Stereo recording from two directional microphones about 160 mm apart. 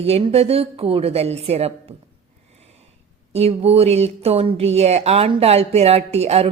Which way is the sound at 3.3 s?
40° right (ahead or behind).